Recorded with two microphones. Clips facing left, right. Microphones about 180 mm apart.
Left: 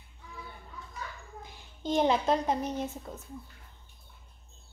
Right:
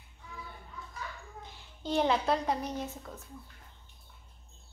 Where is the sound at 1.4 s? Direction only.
15° left (ahead or behind).